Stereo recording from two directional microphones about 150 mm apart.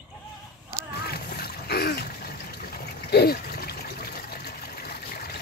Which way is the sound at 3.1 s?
90° left.